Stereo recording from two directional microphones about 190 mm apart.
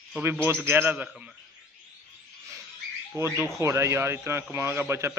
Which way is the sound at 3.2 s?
15° right (ahead or behind).